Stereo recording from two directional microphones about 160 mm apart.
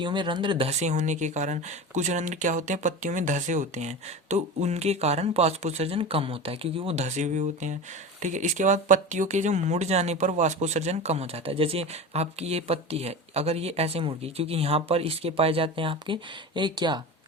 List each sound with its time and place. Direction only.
0.0 s speech: 30° right (ahead or behind)